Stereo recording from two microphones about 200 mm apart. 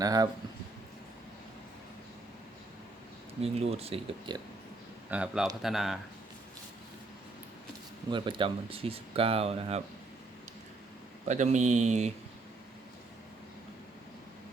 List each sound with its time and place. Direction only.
0.0 s speech: 20° right (ahead or behind)
3.4 s speech: 30° right (ahead or behind)
5.1 s speech: 5° right (ahead or behind)
8.1 s speech: 25° right (ahead or behind)
11.3 s speech: 35° right (ahead or behind)